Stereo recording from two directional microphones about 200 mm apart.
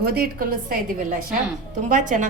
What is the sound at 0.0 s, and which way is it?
Speech, 50° right (ahead or behind).